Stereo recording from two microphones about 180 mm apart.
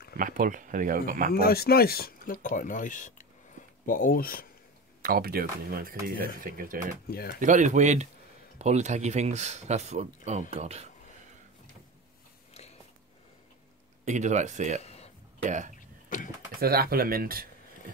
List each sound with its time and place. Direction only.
0.2 s speech: 50° right (ahead or behind)
1.4 s speech: 60° left (ahead or behind)
5.0 s speech: 55° right (ahead or behind)
7.1 s speech: 55° left (ahead or behind)
7.3 s speech: 45° right (ahead or behind)
14.0 s speech: 40° right (ahead or behind)
14.8 s a sound: 35° left (ahead or behind)
15.4 s speech: 45° right (ahead or behind)
16.1 s a sound: 45° left (ahead or behind)
16.6 s speech: 55° right (ahead or behind)